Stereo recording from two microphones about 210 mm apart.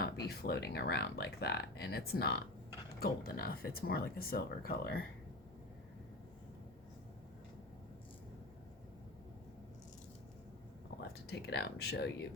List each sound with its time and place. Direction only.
0.3 s speech: 50° left (ahead or behind)
11.3 s speech: 50° left (ahead or behind)